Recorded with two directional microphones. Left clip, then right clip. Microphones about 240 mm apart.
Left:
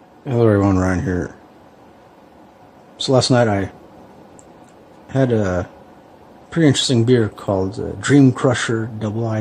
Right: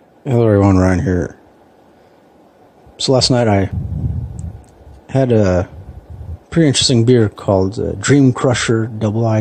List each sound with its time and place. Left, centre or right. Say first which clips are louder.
0.2 s speech: right 3 dB; right
0.8 s speech: right 5 dB; right
3.0 s speech: right 2 dB; right
5.1 s speech: right 5 dB; right